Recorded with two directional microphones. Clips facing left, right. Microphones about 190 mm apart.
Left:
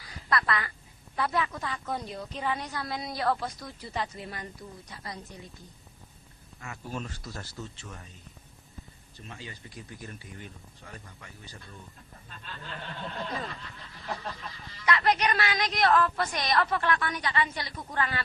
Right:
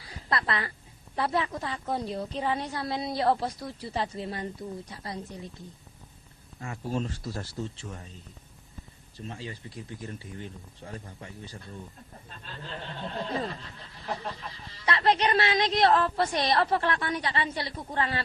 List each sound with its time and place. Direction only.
0.0 s a sound: 25° right (ahead or behind)
1.1 s speech: 30° right (ahead or behind)
6.6 s speech: 30° right (ahead or behind)
9.1 s speech: 30° right (ahead or behind)
12.7 s speech: 30° right (ahead or behind)
14.7 s speech: 30° right (ahead or behind)